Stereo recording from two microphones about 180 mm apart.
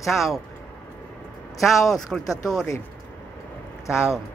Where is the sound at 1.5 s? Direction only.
Centre (ahead or behind).